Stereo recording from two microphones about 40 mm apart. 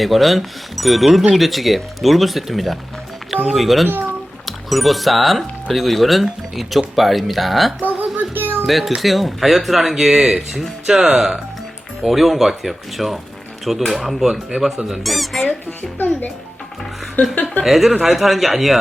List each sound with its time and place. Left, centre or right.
0.0 s speech: centre
7.8 s child singing: right
8.6 s a child's voice: centre
10.8 s speech: centre
17.2 s a woman's voice: left
17.7 s speech: centre